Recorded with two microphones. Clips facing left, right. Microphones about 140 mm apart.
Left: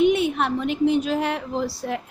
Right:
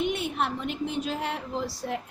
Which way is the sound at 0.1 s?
85° left.